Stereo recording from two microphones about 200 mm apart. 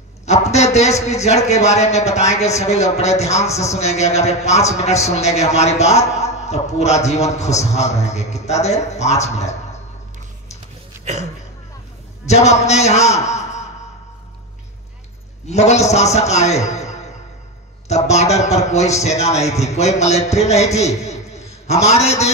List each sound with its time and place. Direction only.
0.2 s a man's voice: 35° left (ahead or behind)
12.3 s a man's voice: 35° left (ahead or behind)
15.4 s a man's voice: 35° left (ahead or behind)